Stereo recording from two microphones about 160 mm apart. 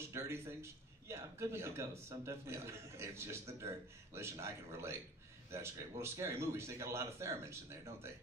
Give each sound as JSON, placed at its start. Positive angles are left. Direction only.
{"t": 0.0, "sound": "a man's voice", "side_deg": -15}